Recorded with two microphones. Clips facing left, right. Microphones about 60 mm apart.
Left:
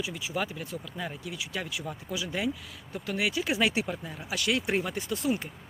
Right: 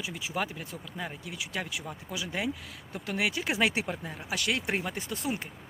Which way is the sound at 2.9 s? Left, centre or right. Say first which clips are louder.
Left 1 dB; right.